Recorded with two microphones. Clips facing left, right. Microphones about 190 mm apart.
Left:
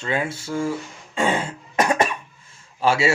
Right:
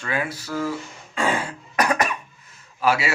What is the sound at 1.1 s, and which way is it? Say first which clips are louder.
Cough: left 2 dB; 25° left (ahead or behind).